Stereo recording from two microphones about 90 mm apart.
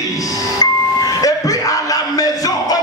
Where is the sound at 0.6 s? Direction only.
40° left (ahead or behind).